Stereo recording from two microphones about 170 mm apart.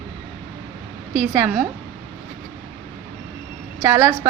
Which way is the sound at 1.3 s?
10° right (ahead or behind).